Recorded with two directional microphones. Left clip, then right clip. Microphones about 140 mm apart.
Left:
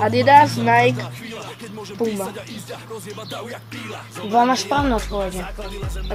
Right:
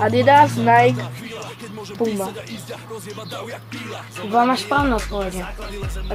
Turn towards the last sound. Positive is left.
turn(degrees=25)  # may be behind; listen again after turning